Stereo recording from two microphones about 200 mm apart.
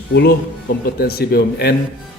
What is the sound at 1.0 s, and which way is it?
Speech, 50° left (ahead or behind).